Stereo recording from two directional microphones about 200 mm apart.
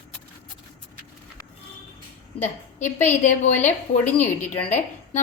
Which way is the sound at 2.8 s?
10° left (ahead or behind).